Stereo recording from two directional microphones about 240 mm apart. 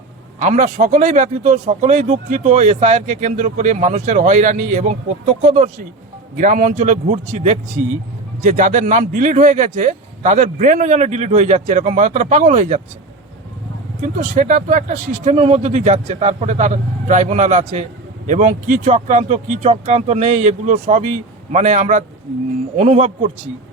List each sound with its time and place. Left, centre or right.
0.3 s speech: right
14.0 s speech: right